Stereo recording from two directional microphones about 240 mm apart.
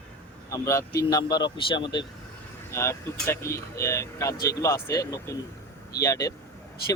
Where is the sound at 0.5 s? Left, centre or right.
Centre.